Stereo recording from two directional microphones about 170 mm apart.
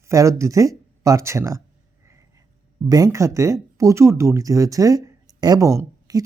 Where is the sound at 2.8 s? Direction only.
20° right (ahead or behind).